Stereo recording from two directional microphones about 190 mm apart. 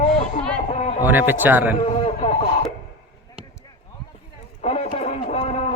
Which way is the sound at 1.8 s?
35° left (ahead or behind).